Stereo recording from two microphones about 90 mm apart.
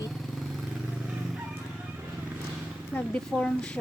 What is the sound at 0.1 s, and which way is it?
Vehicle, centre (ahead or behind).